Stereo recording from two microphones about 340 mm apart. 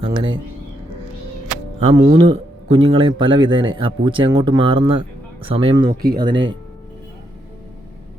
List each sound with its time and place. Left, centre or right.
0.0 s speech: centre
1.8 s speech: centre
6.0 s speech: right
6.2 s speech: centre